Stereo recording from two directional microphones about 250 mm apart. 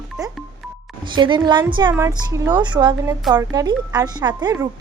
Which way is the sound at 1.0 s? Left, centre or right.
Centre.